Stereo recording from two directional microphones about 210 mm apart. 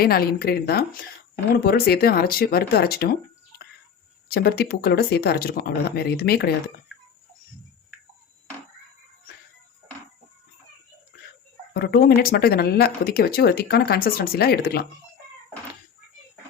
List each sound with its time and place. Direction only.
0.0 s speech: 45° left (ahead or behind)
4.3 s speech: 50° left (ahead or behind)
11.7 s speech: 50° left (ahead or behind)